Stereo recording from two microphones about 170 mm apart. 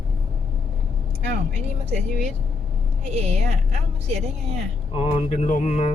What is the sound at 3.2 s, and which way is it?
Speech, 40° right (ahead or behind).